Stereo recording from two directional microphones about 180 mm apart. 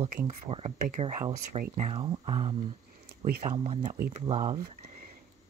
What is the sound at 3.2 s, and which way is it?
Speech, 55° right (ahead or behind).